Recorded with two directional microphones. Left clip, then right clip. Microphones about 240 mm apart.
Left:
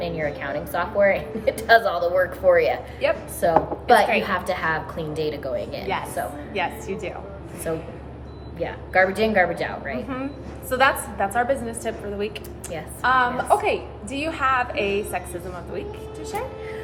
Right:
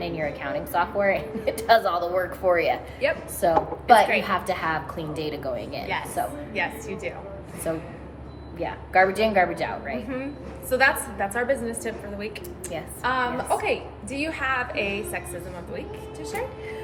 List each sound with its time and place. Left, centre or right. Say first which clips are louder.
0.0 s a woman's voice: left 2 dB; centre
6.5 s a woman's voice: left 2 dB; centre
8.5 s a woman's voice: even; centre
10.7 s a woman's voice: left 1 dB; centre